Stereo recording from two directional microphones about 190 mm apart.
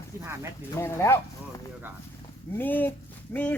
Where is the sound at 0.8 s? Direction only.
15° left (ahead or behind).